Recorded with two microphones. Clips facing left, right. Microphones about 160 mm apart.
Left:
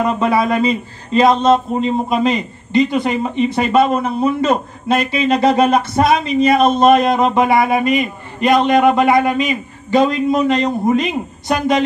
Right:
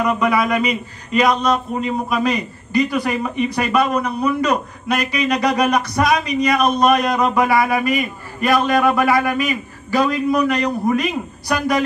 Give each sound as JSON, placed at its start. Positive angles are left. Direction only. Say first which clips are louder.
{"t": 0.0, "sound": "a man's voice", "louder": "left 2 dB", "side_deg": 30}